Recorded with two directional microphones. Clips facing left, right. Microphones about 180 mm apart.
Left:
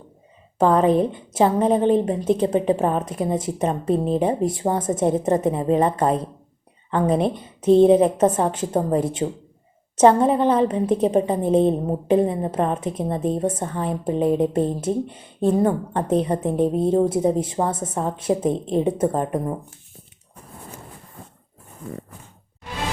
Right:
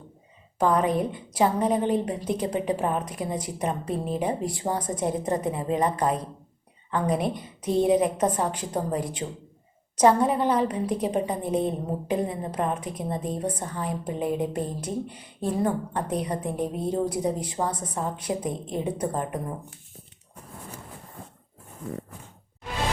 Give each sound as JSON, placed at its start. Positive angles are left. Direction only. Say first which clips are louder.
{"t": 0.6, "sound": "a woman's voice", "louder": "left 6 dB", "side_deg": 30}